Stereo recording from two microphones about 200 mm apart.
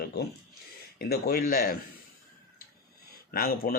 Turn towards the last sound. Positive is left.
turn(degrees=45)  # may be behind; listen again after turning